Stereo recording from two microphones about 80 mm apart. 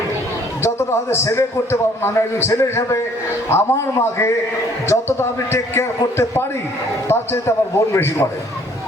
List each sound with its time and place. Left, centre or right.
0.6 s a man's voice: left